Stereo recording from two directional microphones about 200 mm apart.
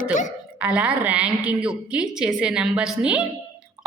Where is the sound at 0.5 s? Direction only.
5° right (ahead or behind).